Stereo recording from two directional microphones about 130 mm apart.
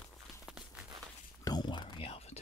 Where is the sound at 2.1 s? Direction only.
50° left (ahead or behind).